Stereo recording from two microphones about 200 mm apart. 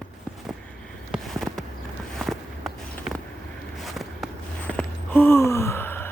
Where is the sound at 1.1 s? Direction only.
Centre (ahead or behind).